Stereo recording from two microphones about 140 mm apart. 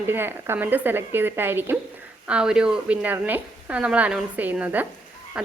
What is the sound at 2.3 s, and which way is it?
A woman's voice, 5° right (ahead or behind).